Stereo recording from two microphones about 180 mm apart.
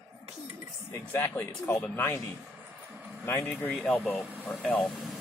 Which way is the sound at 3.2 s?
10° left (ahead or behind).